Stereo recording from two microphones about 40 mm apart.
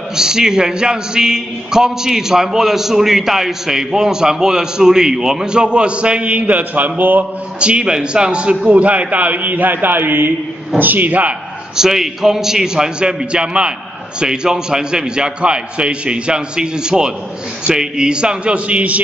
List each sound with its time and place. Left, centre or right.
0.1 s a man's voice: centre
6.4 s speech: right
7.6 s a man's voice: right
10.8 s speech: right
11.7 s a man's voice: centre; by 19.0 s right